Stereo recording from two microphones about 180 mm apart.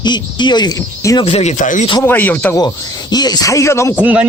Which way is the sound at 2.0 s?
10° left (ahead or behind).